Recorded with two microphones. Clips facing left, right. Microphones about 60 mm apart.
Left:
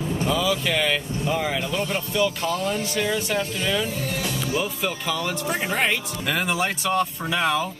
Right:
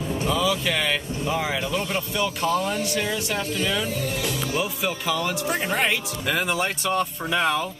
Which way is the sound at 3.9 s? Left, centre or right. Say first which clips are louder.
Right 1 dB; left.